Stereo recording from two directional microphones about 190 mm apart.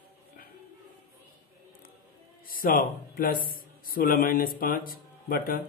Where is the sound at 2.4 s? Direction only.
50° left (ahead or behind).